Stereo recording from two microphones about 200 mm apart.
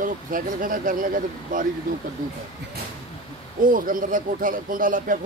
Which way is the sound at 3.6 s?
45° right (ahead or behind).